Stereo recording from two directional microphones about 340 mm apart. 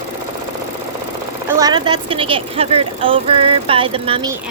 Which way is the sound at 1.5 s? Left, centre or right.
Centre.